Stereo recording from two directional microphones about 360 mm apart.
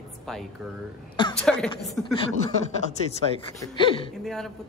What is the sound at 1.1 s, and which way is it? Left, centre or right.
Speech, centre.